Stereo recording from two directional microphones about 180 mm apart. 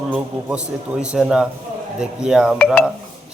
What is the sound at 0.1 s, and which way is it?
A man's voice, 5° right (ahead or behind).